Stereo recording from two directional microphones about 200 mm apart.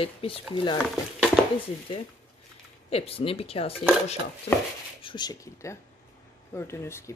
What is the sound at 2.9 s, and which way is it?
Speech, 30° left (ahead or behind).